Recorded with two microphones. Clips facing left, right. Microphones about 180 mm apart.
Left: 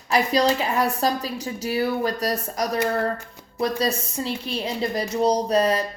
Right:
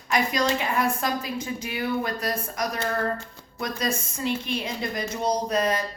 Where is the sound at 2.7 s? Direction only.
15° left (ahead or behind).